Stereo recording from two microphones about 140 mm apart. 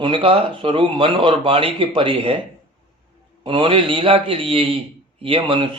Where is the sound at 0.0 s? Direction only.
40° right (ahead or behind).